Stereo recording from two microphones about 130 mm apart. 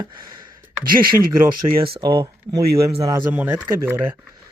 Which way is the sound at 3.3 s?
15° right (ahead or behind).